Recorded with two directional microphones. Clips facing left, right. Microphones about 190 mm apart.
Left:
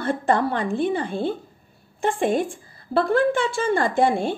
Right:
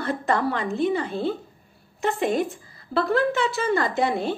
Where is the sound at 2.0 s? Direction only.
30° left (ahead or behind).